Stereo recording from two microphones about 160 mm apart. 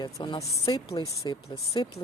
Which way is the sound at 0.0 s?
30° left (ahead or behind).